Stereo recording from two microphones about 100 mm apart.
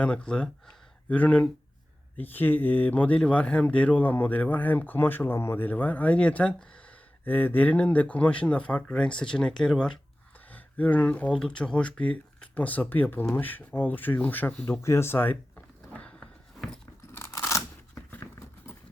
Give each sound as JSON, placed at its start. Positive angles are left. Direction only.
{"t": 0.0, "sound": "speech", "side_deg": 10}
{"t": 17.1, "sound": "scissors", "side_deg": 30}
{"t": 18.1, "sound": "horse", "side_deg": 25}